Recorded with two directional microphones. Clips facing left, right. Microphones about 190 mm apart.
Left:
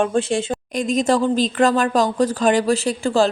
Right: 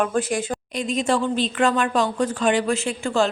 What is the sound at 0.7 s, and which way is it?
Speech, 45° left (ahead or behind).